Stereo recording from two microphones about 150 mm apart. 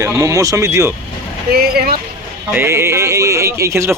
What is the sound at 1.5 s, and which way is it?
Speech, 90° right.